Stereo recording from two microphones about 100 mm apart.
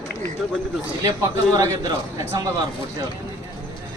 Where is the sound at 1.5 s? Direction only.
30° right (ahead or behind).